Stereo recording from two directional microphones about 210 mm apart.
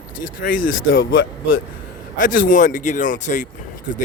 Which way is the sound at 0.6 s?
70° left (ahead or behind).